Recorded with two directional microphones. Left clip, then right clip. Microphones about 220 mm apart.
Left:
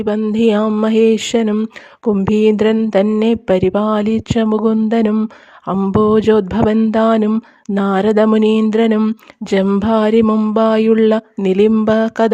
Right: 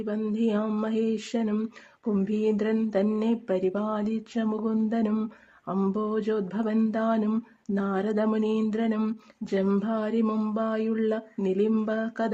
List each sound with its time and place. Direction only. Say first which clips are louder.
0.0 s speech: left 14 dB; 35° left (ahead or behind)